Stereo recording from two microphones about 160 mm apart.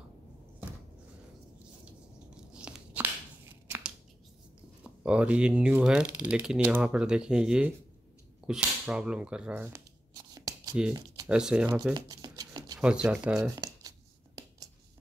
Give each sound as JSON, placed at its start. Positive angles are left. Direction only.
{"t": 2.3, "sound": "biting", "side_deg": -5}
{"t": 3.6, "sound": "a sound", "side_deg": -15}
{"t": 4.8, "sound": "speech", "side_deg": -5}
{"t": 10.3, "sound": "writing", "side_deg": -25}
{"t": 11.2, "sound": "speech", "side_deg": -5}
{"t": 11.9, "sound": "shuffling cards", "side_deg": -25}
{"t": 12.8, "sound": "speech", "side_deg": -5}
{"t": 13.6, "sound": "a sound", "side_deg": -20}